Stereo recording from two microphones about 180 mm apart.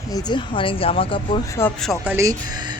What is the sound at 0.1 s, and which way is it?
Speech, 20° left (ahead or behind).